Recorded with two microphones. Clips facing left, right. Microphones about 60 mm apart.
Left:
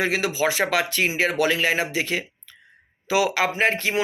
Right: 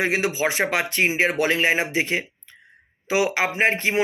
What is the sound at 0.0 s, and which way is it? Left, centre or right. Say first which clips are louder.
Speech: even; right.